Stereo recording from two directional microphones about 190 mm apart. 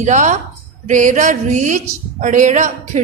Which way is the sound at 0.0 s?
40° right (ahead or behind).